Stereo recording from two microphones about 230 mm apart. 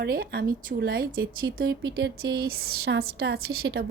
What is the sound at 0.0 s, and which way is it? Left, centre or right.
A woman's voice, right.